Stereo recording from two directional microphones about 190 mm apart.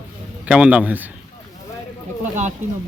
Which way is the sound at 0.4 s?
5° right (ahead or behind).